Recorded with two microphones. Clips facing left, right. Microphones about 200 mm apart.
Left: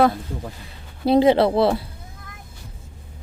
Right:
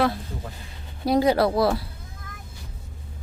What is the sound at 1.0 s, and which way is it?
Speech, 25° left (ahead or behind).